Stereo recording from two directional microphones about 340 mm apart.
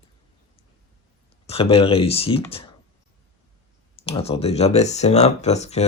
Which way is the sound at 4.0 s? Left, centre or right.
Centre.